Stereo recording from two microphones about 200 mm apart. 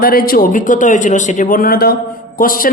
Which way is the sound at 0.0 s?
45° left (ahead or behind).